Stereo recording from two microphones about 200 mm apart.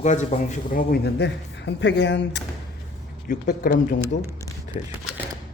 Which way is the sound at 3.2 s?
45° left (ahead or behind).